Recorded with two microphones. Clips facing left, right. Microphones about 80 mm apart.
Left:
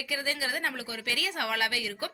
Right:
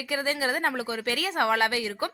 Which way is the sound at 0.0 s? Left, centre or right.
Right.